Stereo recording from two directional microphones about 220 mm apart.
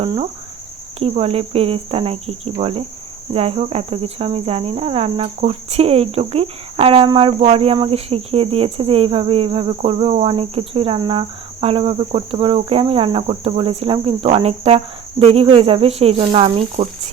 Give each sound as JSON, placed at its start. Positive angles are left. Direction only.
{"t": 0.0, "sound": "cricket", "side_deg": -25}